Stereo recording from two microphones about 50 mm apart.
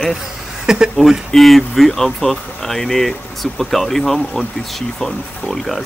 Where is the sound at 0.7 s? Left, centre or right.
Centre.